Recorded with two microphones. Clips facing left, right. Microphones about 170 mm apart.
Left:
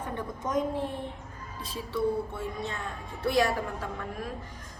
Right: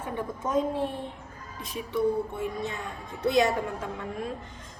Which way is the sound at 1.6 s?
20° right (ahead or behind).